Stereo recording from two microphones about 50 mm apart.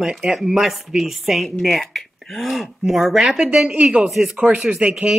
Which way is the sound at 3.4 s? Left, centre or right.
Centre.